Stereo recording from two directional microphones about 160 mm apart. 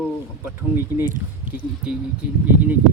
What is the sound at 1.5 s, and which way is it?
Speech, 55° right (ahead or behind).